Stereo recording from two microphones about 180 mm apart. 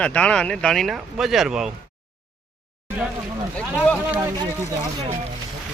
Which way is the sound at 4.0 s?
10° right (ahead or behind).